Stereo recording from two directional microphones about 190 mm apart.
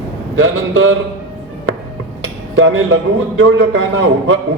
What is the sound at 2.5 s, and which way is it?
Speech, 90° right.